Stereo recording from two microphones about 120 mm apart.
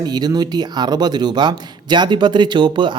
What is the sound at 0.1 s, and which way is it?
Speech, 35° right (ahead or behind).